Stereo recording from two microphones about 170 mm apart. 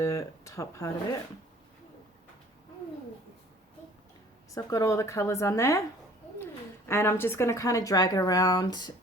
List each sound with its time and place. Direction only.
0.0 s speech: 15° left (ahead or behind)
4.5 s a woman's voice: 20° left (ahead or behind)